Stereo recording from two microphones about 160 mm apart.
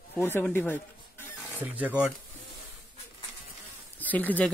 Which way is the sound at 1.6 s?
10° right (ahead or behind).